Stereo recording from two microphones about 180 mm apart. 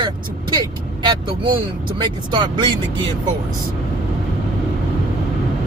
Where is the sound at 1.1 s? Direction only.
25° right (ahead or behind).